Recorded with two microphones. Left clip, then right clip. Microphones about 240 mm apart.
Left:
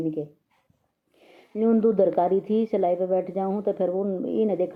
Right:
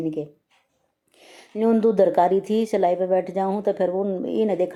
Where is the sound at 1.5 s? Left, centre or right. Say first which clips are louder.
Right 2 dB; centre.